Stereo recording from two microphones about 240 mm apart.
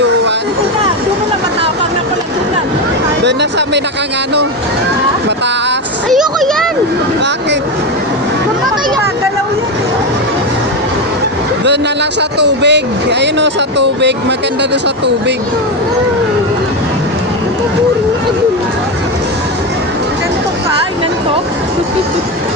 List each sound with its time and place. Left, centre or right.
6.1 s speech: centre
12.4 s speech: right